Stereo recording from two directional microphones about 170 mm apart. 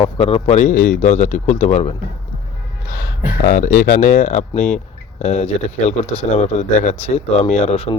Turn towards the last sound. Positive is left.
turn(degrees=35)  # may be behind; listen again after turning